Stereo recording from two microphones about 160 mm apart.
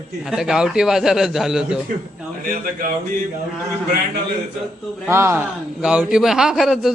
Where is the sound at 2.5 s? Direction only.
55° right (ahead or behind).